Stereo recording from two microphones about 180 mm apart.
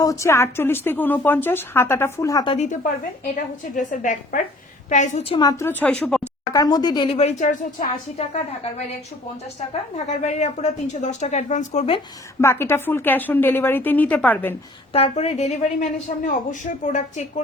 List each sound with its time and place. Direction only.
0.0 s a woman's voice: 15° left (ahead or behind)
2.6 s a woman's voice: 45° left (ahead or behind); by 6.2 s 5° left (ahead or behind)
6.5 s a woman's voice: 20° left (ahead or behind); by 7.9 s 45° left (ahead or behind)
10.1 s a woman's voice: 40° left (ahead or behind)
12.4 s a woman's voice: 15° left (ahead or behind)
14.9 s a woman's voice: 35° left (ahead or behind)